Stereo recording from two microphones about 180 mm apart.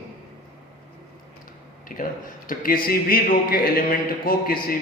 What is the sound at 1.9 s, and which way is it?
A man's voice, 50° left (ahead or behind).